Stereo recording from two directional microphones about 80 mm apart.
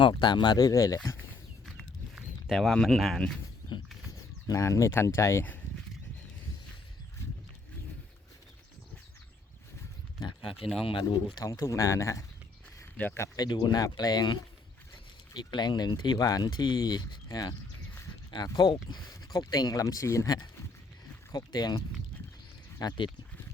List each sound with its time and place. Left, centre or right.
0.0 s speech: left
2.5 s speech: centre
4.4 s speech: left
10.2 s speech: left
11.4 s speech: left
13.0 s speech: centre
13.3 s speech: left
18.5 s speech: left
22.8 s speech: left